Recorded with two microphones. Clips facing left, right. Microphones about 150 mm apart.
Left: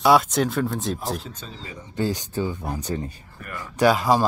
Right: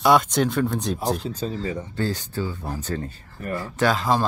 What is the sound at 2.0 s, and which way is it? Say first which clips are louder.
Speech: left 5 dB; 15° left (ahead or behind).